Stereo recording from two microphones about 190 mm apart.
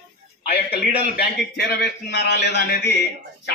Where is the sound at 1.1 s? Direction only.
55° left (ahead or behind).